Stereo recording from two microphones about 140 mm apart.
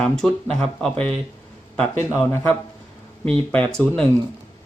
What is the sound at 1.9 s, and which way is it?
Speech, 20° left (ahead or behind).